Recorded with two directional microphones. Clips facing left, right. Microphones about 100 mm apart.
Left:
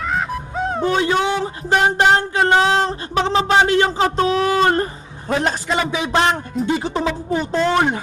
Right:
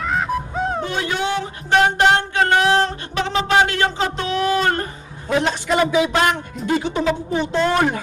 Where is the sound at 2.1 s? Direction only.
30° left (ahead or behind).